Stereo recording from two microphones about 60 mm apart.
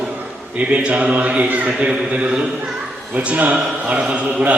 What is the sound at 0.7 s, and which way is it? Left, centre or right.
Speech, centre.